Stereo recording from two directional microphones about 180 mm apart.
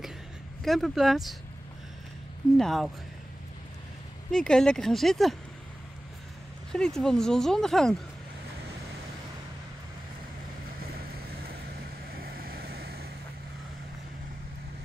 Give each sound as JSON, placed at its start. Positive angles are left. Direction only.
{"t": 0.7, "sound": "speech", "side_deg": 0}
{"t": 2.5, "sound": "speech", "side_deg": 0}
{"t": 4.3, "sound": "speech", "side_deg": 5}
{"t": 6.7, "sound": "speech", "side_deg": 5}
{"t": 12.1, "sound": "vehicle", "side_deg": -55}